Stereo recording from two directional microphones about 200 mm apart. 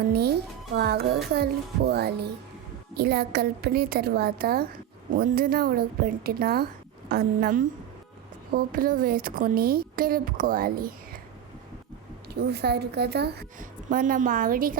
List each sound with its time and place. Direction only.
0.1 s speech: 55° right (ahead or behind)
12.3 s speech: 55° right (ahead or behind)